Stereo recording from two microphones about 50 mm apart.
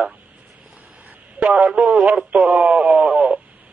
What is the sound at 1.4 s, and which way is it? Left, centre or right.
Speech, right.